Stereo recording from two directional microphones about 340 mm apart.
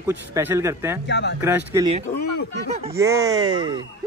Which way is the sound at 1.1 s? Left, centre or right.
Left.